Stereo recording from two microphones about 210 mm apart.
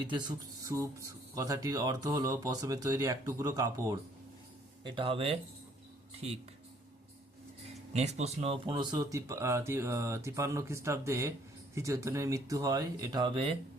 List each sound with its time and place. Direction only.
0.0 s speech: 20° right (ahead or behind)
7.9 s speech: 30° right (ahead or behind)